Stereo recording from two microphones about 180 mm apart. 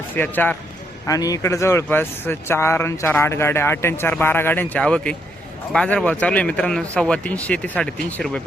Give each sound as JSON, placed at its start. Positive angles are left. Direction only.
{"t": 0.2, "sound": "speech", "side_deg": 10}